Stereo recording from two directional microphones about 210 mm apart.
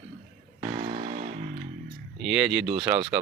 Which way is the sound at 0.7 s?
30° right (ahead or behind).